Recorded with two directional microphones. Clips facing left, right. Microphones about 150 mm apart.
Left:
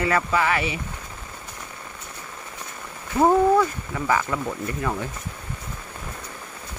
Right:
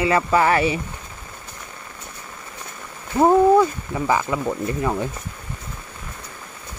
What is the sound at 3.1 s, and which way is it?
Speech, 20° right (ahead or behind).